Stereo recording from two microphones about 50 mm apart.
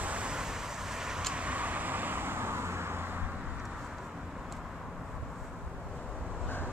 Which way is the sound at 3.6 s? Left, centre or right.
Centre.